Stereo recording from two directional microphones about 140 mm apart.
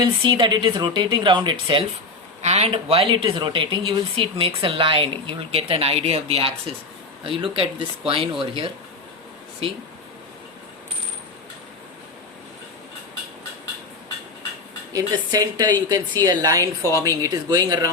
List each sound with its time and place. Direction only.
0.0 s speech: 35° right (ahead or behind)
2.4 s speech: 50° right (ahead or behind)
14.9 s a woman's voice: 25° right (ahead or behind)